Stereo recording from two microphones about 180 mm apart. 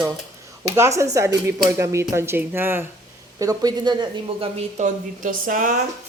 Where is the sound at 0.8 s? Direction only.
15° right (ahead or behind).